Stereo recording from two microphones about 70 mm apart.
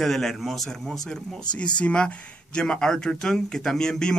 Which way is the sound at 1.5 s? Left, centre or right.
Centre.